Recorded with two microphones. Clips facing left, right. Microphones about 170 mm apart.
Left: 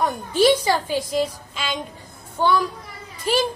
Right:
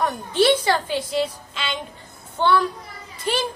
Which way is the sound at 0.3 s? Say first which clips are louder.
Left 1 dB; 10° left (ahead or behind).